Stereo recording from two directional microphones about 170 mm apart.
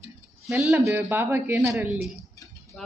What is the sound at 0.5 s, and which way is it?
A man's voice, 15° right (ahead or behind).